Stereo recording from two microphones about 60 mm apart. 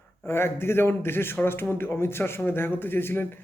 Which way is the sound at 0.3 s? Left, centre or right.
Left.